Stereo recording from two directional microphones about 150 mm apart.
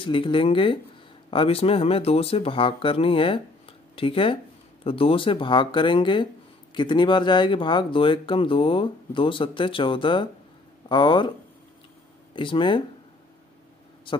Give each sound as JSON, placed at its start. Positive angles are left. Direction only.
{"t": 0.0, "sound": "speech", "side_deg": 35}
{"t": 12.4, "sound": "speech", "side_deg": 35}